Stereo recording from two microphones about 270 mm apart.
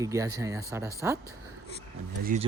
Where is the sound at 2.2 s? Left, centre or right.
Right.